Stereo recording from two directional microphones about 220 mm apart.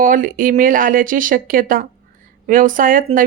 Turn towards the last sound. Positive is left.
turn(degrees=-40)  # may be behind; listen again after turning